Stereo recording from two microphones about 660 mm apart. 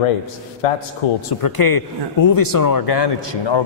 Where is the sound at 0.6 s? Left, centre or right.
Left.